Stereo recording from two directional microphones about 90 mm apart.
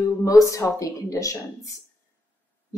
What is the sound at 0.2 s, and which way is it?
A woman's voice, 35° left (ahead or behind).